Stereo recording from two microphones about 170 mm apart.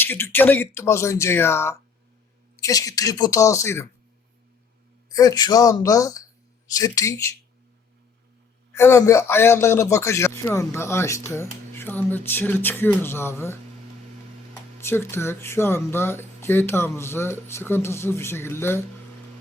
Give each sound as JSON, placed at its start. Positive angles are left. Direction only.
{"t": 0.0, "sound": "a man's voice", "side_deg": 10}
{"t": 5.0, "sound": "speech", "side_deg": 20}
{"t": 8.7, "sound": "a man's voice", "side_deg": 15}
{"t": 14.8, "sound": "a man's voice", "side_deg": 15}